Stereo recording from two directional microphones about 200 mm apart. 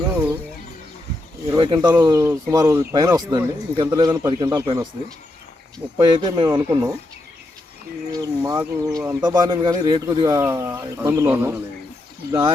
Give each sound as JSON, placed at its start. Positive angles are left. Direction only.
{"t": 1.5, "sound": "speech", "side_deg": -25}
{"t": 6.0, "sound": "speech", "side_deg": -20}
{"t": 8.1, "sound": "speech", "side_deg": -20}
{"t": 12.3, "sound": "speech", "side_deg": -25}